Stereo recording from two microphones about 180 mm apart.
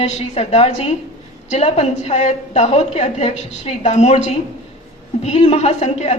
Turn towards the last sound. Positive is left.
turn(degrees=40)  # may be behind; listen again after turning